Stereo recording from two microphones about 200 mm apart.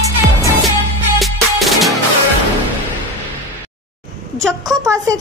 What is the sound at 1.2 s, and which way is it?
Music, centre (ahead or behind).